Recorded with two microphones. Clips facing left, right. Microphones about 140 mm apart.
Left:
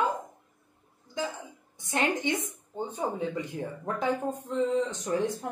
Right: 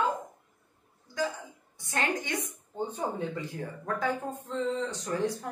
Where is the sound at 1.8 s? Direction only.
20° left (ahead or behind).